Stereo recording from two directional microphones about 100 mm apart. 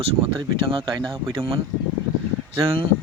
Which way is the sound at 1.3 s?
70° right (ahead or behind).